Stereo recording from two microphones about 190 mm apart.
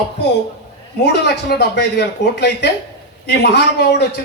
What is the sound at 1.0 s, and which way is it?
A man's voice, 60° left (ahead or behind).